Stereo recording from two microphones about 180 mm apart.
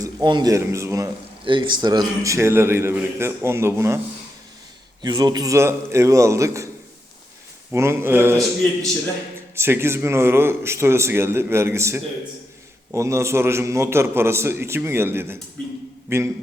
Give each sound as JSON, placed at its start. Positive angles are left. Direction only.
{"t": 0.0, "sound": "a man's voice", "side_deg": -25}
{"t": 1.5, "sound": "a man's voice", "side_deg": -25}
{"t": 5.0, "sound": "a man's voice", "side_deg": -25}
{"t": 7.7, "sound": "a man's voice", "side_deg": -15}
{"t": 9.6, "sound": "a man's voice", "side_deg": -15}